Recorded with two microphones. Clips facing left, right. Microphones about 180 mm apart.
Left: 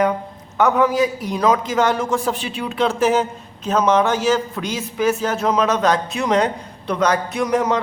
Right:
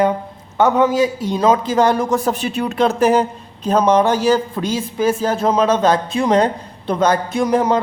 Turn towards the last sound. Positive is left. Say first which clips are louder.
# right 3 dB
turn(degrees=-30)  # may be behind; listen again after turning